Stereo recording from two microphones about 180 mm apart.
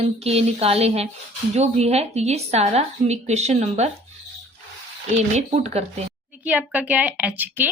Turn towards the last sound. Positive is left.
turn(degrees=-10)  # may be behind; listen again after turning